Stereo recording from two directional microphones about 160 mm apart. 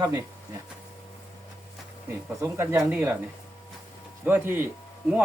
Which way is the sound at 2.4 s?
20° right (ahead or behind).